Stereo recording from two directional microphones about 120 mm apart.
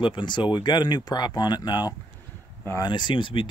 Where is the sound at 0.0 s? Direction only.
40° left (ahead or behind).